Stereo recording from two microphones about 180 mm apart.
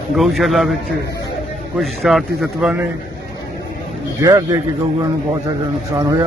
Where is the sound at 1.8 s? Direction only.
Centre (ahead or behind).